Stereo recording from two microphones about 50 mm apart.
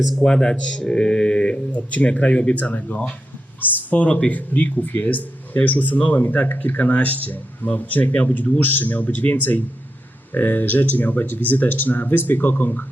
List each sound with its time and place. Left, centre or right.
0.2 s speech: centre; by 12.8 s left